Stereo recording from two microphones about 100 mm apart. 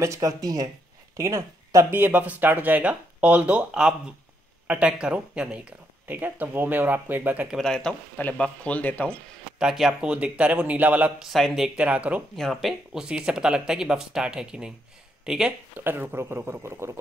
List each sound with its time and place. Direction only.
0.0 s speech: 30° right (ahead or behind)
7.5 s speech: 5° left (ahead or behind)
9.6 s speech: 5° right (ahead or behind)
12.4 s speech: centre (ahead or behind)
15.8 s speech: 20° right (ahead or behind)